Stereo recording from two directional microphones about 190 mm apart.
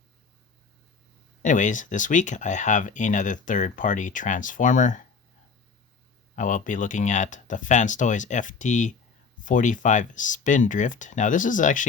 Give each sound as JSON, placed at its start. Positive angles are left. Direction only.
{"t": 1.4, "sound": "speech", "side_deg": 40}
{"t": 6.3, "sound": "speech", "side_deg": 40}